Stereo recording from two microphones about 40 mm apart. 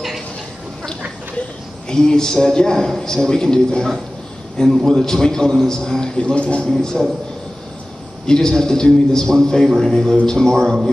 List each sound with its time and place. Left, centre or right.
1.9 s a man's voice: centre
6.6 s a man's voice: centre
8.3 s a man's voice: centre